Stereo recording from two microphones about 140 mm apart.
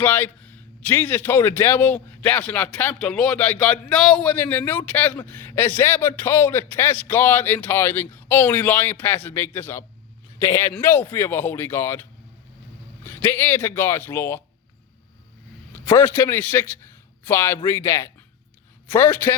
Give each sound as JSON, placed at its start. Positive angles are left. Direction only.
{"t": 0.0, "sound": "a man's voice", "side_deg": 15}
{"t": 13.1, "sound": "a man's voice", "side_deg": 15}
{"t": 15.9, "sound": "a man's voice", "side_deg": 15}